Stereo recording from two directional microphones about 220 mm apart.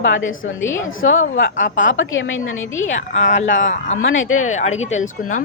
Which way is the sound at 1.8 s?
60° left (ahead or behind).